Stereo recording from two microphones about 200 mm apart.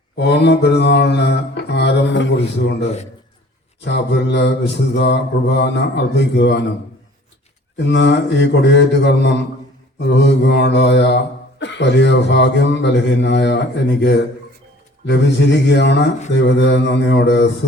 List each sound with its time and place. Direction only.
0.2 s mantra: 60° left (ahead or behind)
7.9 s mantra: 60° left (ahead or behind)